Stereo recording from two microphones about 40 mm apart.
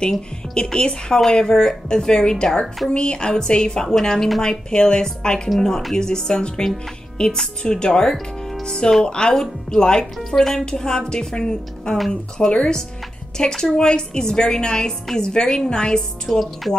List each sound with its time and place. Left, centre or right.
0.6 s a woman's voice: centre
10.1 s a woman's voice: centre
11.0 s a woman's voice: centre
14.9 s a woman's voice: centre
15.2 s a woman's voice: centre
16.3 s music: centre